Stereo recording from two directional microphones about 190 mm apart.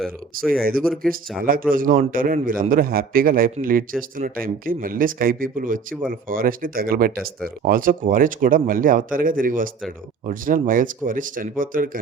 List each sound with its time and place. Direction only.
0.8 s speech: centre (ahead or behind)
1.4 s speech: 50° right (ahead or behind)